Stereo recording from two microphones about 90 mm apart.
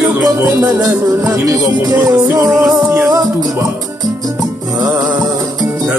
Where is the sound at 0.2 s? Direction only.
35° right (ahead or behind).